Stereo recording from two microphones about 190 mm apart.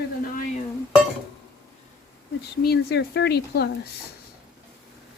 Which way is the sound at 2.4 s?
55° left (ahead or behind).